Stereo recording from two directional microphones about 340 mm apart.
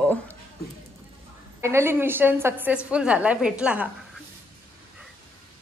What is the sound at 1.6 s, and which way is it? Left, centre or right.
A woman's voice, centre.